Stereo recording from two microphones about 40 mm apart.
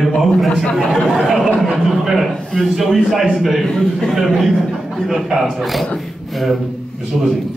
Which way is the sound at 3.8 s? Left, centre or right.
Centre.